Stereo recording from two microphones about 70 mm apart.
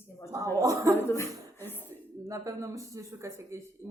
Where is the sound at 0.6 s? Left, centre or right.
Right.